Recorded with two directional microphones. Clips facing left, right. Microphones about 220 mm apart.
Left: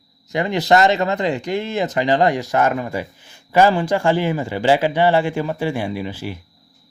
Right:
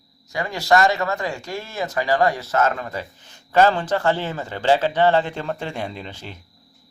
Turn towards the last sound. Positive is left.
turn(degrees=10)  # may be behind; listen again after turning